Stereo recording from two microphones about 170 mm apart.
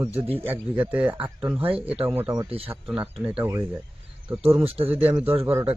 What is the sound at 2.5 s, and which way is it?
Speech, 35° right (ahead or behind).